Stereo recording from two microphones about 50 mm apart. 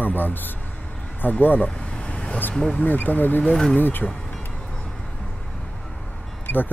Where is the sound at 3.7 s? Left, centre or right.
Left.